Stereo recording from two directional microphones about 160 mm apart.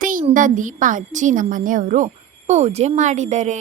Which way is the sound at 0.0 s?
55° right (ahead or behind).